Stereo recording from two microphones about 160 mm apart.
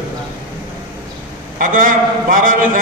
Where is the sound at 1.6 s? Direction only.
55° right (ahead or behind).